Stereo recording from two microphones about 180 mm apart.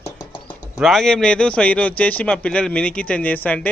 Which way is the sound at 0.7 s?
Centre (ahead or behind).